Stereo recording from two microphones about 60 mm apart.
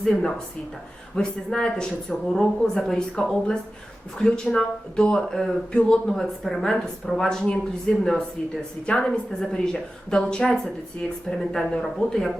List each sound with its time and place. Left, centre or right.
0.0 s speech: centre